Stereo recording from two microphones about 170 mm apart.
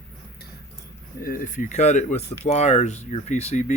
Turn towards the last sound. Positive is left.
turn(degrees=40)  # may be behind; listen again after turning